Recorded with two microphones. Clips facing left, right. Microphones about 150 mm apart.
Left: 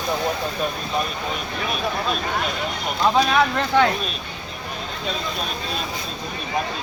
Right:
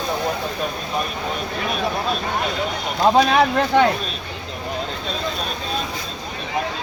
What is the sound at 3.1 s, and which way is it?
Speech, 40° right (ahead or behind).